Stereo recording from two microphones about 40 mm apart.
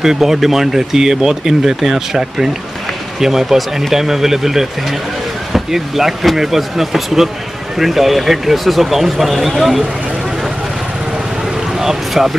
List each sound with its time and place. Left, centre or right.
0.0 s speech: centre
11.7 s boat: centre